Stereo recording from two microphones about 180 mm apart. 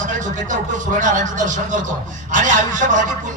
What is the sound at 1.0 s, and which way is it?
Speech, 45° right (ahead or behind).